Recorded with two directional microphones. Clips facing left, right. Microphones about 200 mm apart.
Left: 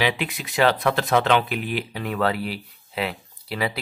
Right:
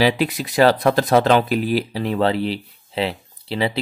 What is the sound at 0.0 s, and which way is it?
Speech, 40° right (ahead or behind).